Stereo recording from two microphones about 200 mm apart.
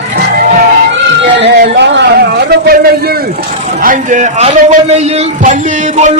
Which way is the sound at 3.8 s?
40° right (ahead or behind).